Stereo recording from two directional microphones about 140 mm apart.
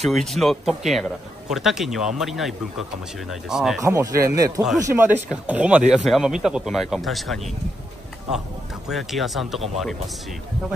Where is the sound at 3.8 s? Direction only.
20° right (ahead or behind); by 7.3 s centre (ahead or behind).